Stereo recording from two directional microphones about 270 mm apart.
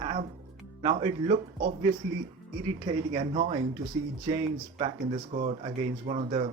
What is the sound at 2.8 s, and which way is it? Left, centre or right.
Speech, right.